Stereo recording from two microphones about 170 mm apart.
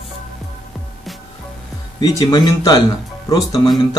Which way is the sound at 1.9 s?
25° left (ahead or behind).